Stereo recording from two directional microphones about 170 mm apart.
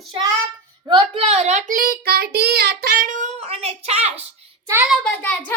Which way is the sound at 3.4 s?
40° right (ahead or behind).